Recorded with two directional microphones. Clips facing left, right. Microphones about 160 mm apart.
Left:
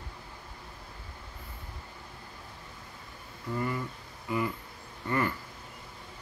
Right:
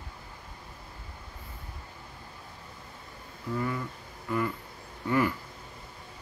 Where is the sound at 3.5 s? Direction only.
5° left (ahead or behind).